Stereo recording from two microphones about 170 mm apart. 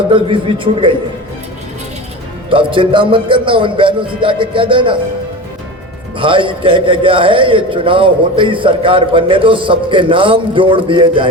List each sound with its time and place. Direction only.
0.1 s a man's voice: 30° right (ahead or behind)
2.5 s a man's voice: 30° right (ahead or behind)
6.1 s a man's voice: 30° right (ahead or behind)